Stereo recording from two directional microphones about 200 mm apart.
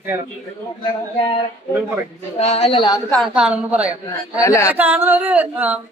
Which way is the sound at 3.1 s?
Centre (ahead or behind).